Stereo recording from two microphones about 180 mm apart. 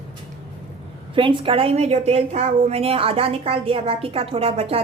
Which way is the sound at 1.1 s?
30° right (ahead or behind).